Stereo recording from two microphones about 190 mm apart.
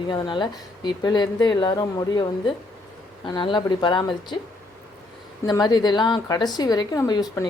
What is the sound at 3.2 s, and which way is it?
Speech, 25° left (ahead or behind).